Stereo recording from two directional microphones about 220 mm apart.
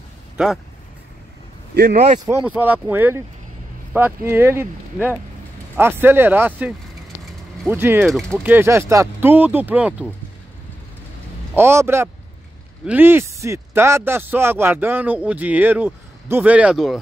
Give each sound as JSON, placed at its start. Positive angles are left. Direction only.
{"t": 1.7, "sound": "speech", "side_deg": -50}
{"t": 2.2, "sound": "speech", "side_deg": -10}
{"t": 8.1, "sound": "speech", "side_deg": 0}
{"t": 8.5, "sound": "speech", "side_deg": -10}
{"t": 11.5, "sound": "speech", "side_deg": -10}